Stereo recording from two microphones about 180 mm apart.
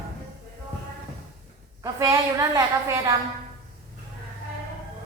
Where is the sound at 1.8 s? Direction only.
15° right (ahead or behind).